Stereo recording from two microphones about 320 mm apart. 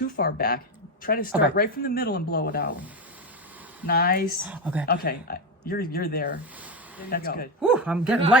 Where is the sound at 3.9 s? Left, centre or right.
Left.